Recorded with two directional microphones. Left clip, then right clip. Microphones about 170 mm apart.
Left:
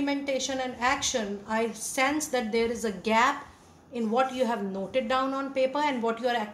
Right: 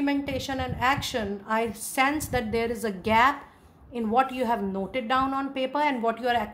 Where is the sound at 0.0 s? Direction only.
65° right (ahead or behind).